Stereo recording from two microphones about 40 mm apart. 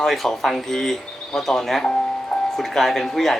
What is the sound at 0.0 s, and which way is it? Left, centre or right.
Speech, centre.